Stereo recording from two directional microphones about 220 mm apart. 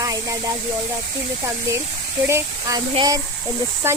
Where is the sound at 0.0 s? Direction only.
15° right (ahead or behind).